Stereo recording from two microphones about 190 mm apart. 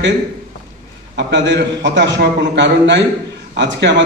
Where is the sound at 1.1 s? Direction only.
70° right (ahead or behind).